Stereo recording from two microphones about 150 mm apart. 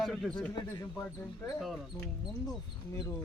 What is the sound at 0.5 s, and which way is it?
Speech, 25° left (ahead or behind).